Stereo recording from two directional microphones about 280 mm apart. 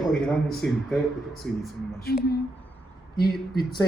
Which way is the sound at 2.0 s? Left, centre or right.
Left.